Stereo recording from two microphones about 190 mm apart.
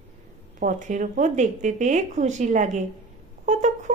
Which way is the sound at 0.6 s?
40° right (ahead or behind).